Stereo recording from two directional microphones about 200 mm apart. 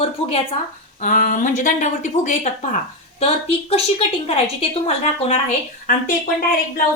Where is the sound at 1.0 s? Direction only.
40° left (ahead or behind).